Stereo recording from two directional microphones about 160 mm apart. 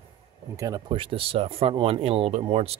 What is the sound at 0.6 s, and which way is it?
Speech, 25° right (ahead or behind).